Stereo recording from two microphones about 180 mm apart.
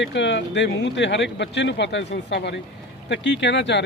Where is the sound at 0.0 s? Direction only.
80° left.